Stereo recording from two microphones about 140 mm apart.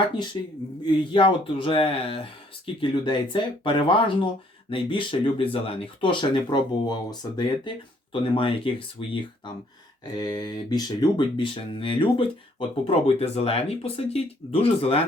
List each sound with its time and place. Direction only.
0.4 s speech: 30° left (ahead or behind)
10.2 s speech: 30° left (ahead or behind)